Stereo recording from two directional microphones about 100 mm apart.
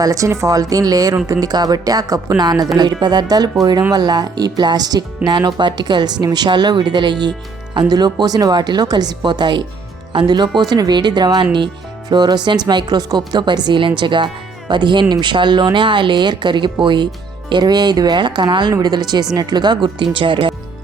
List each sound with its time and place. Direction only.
0.0 s a woman's voice: 35° right (ahead or behind); by 20.6 s 55° right (ahead or behind)